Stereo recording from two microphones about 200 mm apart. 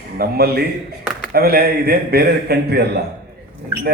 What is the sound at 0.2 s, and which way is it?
A man's voice, 50° right (ahead or behind).